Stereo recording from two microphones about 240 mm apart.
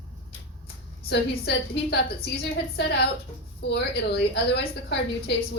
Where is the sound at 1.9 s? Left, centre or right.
Left.